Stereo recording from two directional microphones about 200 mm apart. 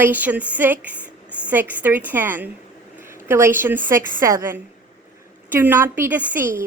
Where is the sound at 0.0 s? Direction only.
10° right (ahead or behind).